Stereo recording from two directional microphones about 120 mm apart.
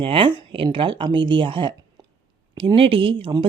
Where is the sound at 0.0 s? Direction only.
45° right (ahead or behind).